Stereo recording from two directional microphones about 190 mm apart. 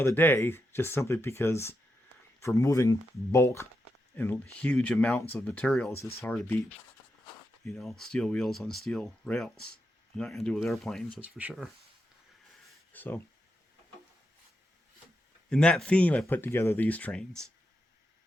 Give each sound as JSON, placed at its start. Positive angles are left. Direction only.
{"t": 0.0, "sound": "speech", "side_deg": 10}
{"t": 12.6, "sound": "a sound", "side_deg": 10}
{"t": 15.4, "sound": "speech", "side_deg": 5}